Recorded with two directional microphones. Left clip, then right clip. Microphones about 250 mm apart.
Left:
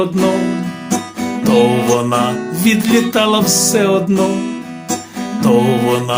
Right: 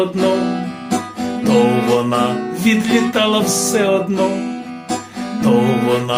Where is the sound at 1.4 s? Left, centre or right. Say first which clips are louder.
Left 2 dB; left.